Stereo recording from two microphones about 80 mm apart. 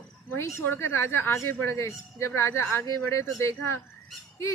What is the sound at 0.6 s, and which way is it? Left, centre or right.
A woman's voice, left.